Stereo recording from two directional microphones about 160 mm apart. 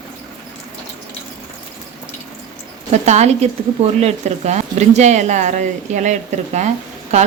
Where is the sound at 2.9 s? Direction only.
45° right (ahead or behind).